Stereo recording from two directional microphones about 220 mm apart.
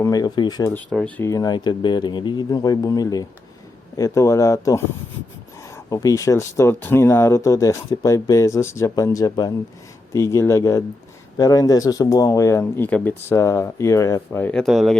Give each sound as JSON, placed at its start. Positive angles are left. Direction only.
{"t": 0.0, "sound": "speech", "side_deg": 15}
{"t": 0.7, "sound": "speech", "side_deg": 5}